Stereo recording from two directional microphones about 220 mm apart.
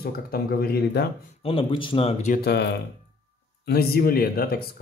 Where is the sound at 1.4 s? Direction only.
25° left (ahead or behind).